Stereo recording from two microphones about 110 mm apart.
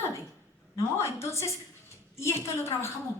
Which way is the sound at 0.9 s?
25° left (ahead or behind).